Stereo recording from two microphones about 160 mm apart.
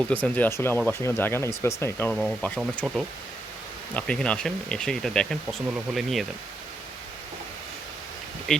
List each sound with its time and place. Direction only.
0.1 s speech: 10° left (ahead or behind)
8.5 s speech: 5° left (ahead or behind)